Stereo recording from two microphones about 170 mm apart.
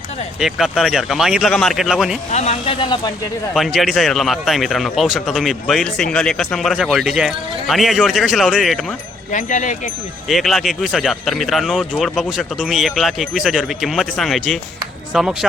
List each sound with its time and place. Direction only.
0.3 s speech: centre (ahead or behind)
2.3 s speech: 40° left (ahead or behind)
2.8 s speech: 25° left (ahead or behind)
3.5 s speech: centre (ahead or behind)
9.3 s speech: 50° left (ahead or behind)
10.2 s speech: centre (ahead or behind)